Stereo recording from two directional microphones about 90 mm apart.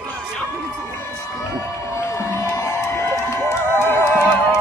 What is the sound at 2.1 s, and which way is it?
Music, 35° left (ahead or behind).